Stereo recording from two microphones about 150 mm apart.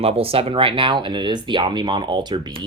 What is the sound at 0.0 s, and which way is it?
Speech, 40° right (ahead or behind).